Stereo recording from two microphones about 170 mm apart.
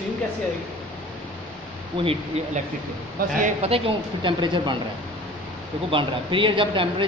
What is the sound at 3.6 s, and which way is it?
A woman's voice, 35° right (ahead or behind).